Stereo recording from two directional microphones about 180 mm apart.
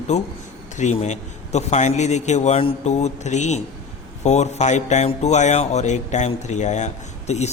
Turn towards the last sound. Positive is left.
turn(degrees=40)  # may be behind; listen again after turning